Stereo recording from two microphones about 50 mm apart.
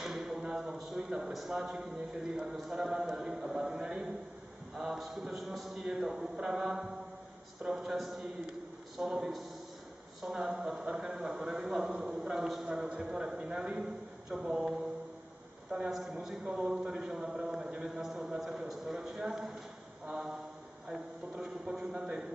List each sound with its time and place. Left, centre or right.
0.0 s a sound: centre
1.5 s a man's voice: centre
4.7 s mantra: centre
5.9 s a man's voice: centre
15.9 s a man's voice: centre